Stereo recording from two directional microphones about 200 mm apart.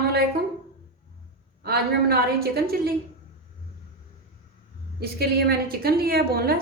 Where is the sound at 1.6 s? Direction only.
50° right (ahead or behind).